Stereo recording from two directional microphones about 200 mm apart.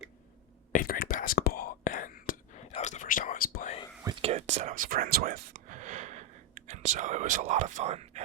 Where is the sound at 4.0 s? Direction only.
25° right (ahead or behind).